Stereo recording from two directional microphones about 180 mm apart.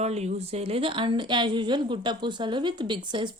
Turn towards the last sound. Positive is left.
turn(degrees=-25)  # may be behind; listen again after turning